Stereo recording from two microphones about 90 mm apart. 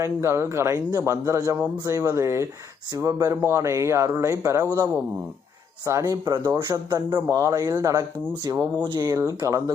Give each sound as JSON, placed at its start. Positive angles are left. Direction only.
{"t": 0.0, "sound": "speech", "side_deg": -30}
{"t": 8.7, "sound": "speech", "side_deg": -55}